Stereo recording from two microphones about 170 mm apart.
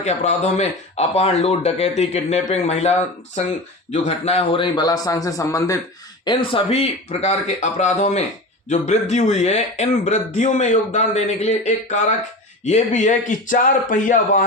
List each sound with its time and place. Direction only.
0.0 s speech: 40° left (ahead or behind)
3.9 s a man's voice: 40° left (ahead or behind); by 5.8 s 20° left (ahead or behind)
6.2 s a man's voice: 30° left (ahead or behind); by 14.4 s 50° left (ahead or behind)